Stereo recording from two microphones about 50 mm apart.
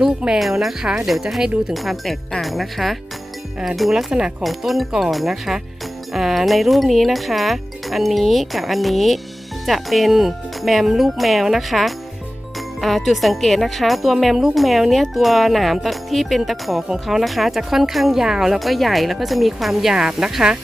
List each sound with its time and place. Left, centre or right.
0.3 s speech: centre
1.7 s speech: centre
4.1 s speech: centre
4.4 s speech: centre